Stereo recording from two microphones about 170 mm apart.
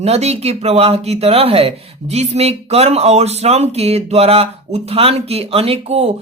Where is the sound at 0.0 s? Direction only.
40° right (ahead or behind).